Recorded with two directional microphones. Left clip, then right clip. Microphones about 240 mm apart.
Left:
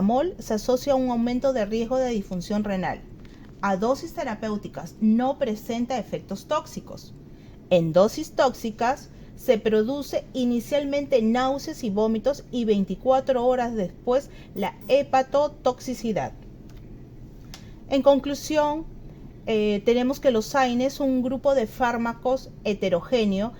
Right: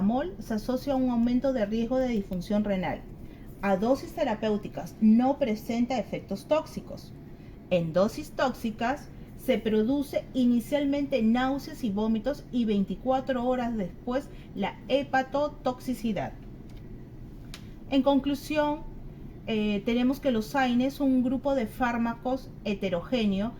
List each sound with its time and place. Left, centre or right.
0.1 s a woman's voice: left
5.1 s a woman's voice: left
17.8 s a woman's voice: left